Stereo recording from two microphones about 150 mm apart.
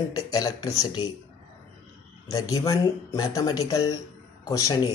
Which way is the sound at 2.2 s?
25° left (ahead or behind).